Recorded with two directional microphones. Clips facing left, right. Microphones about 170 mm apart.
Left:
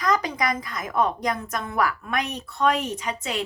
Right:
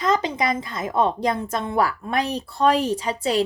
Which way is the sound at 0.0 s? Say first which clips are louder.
Right 2 dB; 25° right (ahead or behind).